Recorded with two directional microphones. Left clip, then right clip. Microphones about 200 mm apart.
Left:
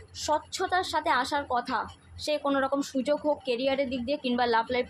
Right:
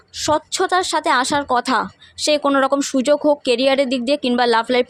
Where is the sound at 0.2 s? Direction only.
55° right (ahead or behind).